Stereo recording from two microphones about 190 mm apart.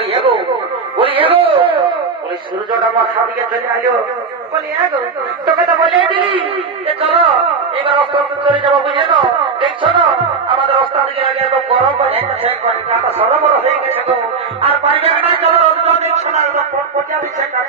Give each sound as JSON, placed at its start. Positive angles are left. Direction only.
{"t": 0.1, "sound": "radio", "side_deg": -30}
{"t": 1.1, "sound": "a sound", "side_deg": -30}
{"t": 2.7, "sound": "a man's voice", "side_deg": -25}
{"t": 5.8, "sound": "a man's voice", "side_deg": -25}
{"t": 10.5, "sound": "music", "side_deg": -25}
{"t": 11.1, "sound": "a man's voice", "side_deg": -30}